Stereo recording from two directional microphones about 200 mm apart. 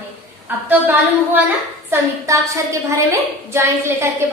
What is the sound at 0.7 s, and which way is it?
A woman's voice, 10° right (ahead or behind).